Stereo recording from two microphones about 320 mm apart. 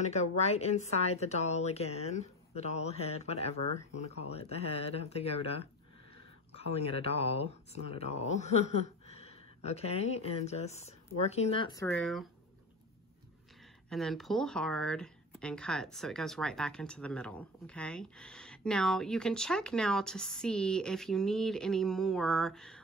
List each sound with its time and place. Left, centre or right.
0.0 s speech: centre
13.8 s speech: centre